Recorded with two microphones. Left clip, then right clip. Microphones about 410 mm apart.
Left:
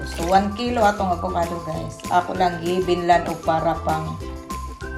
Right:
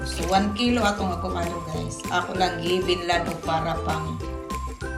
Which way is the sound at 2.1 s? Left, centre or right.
Centre.